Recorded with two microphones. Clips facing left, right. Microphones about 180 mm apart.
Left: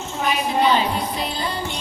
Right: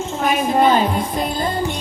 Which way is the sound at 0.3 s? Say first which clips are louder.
Right 4 dB; 50° right (ahead or behind).